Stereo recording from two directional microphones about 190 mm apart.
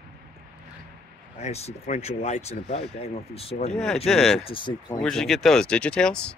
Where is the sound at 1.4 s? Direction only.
35° left (ahead or behind).